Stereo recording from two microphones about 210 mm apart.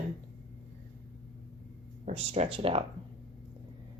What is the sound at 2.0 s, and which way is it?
Speech, 30° right (ahead or behind).